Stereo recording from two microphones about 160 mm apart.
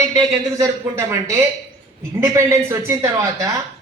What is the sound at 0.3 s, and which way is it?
A man's voice, 20° right (ahead or behind).